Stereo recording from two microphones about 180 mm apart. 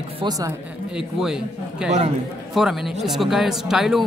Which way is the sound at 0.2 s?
20° right (ahead or behind).